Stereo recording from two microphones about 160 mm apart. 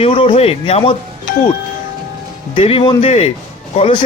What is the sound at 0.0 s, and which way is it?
Speech, 35° left (ahead or behind).